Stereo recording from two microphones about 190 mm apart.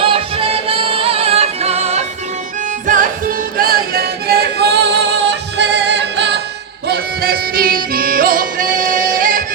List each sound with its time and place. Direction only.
0.0 s music: 30° right (ahead or behind)
2.8 s music: 45° right (ahead or behind); by 6.2 s 65° right (ahead or behind)
6.8 s music: 55° right (ahead or behind)